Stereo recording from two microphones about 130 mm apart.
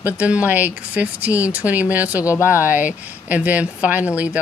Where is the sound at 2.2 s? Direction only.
25° left (ahead or behind).